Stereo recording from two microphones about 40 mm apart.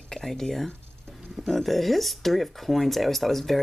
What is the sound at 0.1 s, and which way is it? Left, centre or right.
Speech, centre.